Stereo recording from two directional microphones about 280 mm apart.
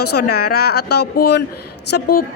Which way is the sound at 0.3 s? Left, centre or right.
Left.